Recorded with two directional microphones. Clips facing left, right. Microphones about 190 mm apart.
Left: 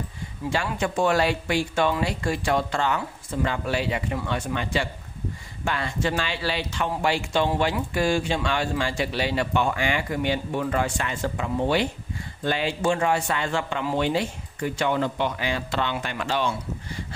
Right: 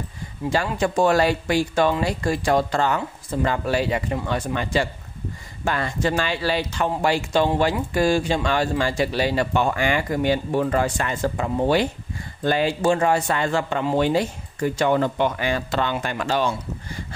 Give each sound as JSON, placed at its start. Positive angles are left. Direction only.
{"t": 0.5, "sound": "speech", "side_deg": -40}